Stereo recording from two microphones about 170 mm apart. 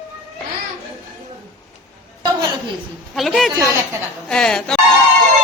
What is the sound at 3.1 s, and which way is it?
Speech, centre (ahead or behind).